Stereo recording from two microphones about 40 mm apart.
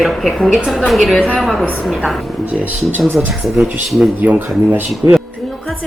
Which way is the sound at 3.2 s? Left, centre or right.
Right.